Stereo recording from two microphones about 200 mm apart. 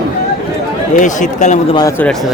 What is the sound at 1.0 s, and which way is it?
Speech, 40° left (ahead or behind).